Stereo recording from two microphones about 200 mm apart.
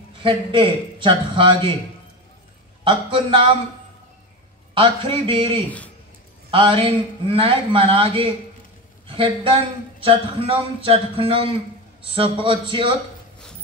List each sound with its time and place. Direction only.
0.2 s speech: 25° right (ahead or behind)
2.8 s speech: 25° right (ahead or behind)
4.7 s speech: 30° right (ahead or behind)